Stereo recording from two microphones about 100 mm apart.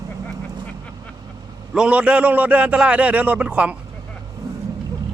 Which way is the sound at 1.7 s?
10° right (ahead or behind).